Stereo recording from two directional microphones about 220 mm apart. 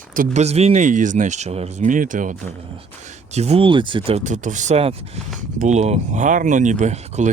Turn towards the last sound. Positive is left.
turn(degrees=-30)  # may be behind; listen again after turning